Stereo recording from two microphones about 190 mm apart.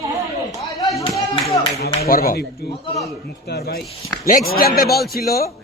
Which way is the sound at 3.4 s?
55° left (ahead or behind).